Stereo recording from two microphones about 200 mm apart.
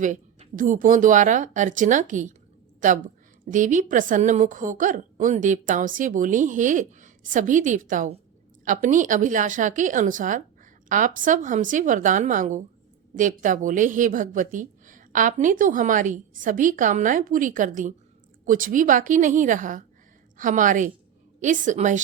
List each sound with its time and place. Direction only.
0.0 s a woman's voice: 40° right (ahead or behind)
3.5 s a woman's voice: 40° right (ahead or behind)